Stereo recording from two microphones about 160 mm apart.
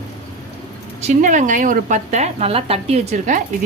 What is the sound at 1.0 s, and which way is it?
A woman's voice, 50° right (ahead or behind).